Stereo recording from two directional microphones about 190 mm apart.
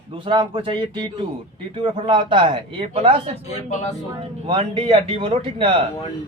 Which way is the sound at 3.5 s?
35° left (ahead or behind).